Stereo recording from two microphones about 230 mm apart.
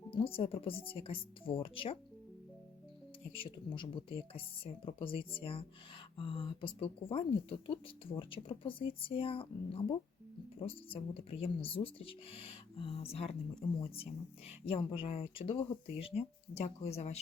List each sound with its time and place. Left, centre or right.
0.1 s speech: left
3.3 s speech: left